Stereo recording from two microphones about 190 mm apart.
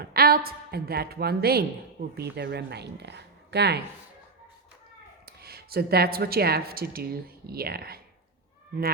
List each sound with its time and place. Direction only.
0.0 s a woman's voice: 50° right (ahead or behind)
2.3 s speech: 60° right (ahead or behind)
5.2 s speech: 55° right (ahead or behind)